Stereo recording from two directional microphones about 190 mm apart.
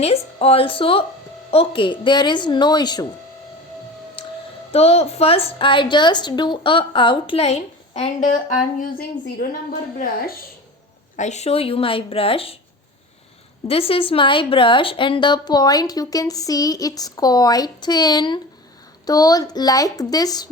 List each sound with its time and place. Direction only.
0.0 s a woman's voice: 30° left (ahead or behind)
4.2 s a sound: 30° left (ahead or behind)
4.7 s a woman's voice: 30° left (ahead or behind); by 10.3 s 50° left (ahead or behind)
11.2 s speech: 35° left (ahead or behind)
13.7 s speech: 30° left (ahead or behind)